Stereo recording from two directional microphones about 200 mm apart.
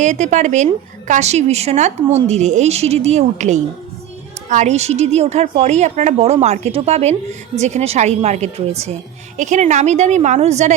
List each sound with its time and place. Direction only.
0.0 s a woman's voice: 35° right (ahead or behind)